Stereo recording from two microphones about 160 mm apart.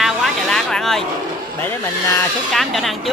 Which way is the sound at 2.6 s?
Centre (ahead or behind).